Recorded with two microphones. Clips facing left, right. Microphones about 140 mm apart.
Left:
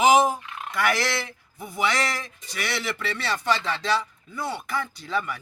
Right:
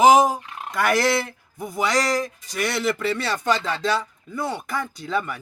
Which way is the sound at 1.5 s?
45° right (ahead or behind).